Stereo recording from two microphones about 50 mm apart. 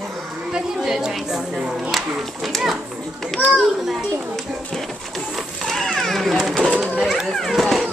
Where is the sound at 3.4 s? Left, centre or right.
Left.